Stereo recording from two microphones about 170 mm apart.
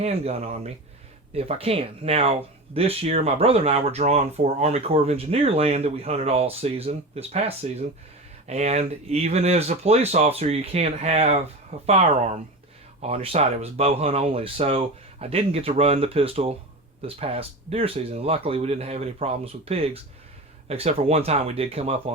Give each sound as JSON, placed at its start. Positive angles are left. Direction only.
{"t": 0.0, "sound": "speech", "side_deg": -40}
{"t": 13.0, "sound": "speech", "side_deg": -35}